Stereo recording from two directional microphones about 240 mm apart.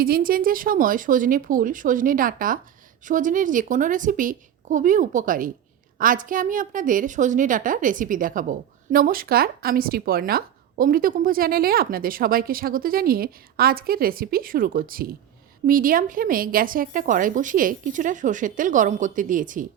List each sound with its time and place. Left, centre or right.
0.0 s a woman's voice: right